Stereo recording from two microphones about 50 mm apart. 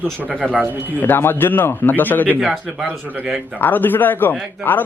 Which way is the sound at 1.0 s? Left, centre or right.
Left.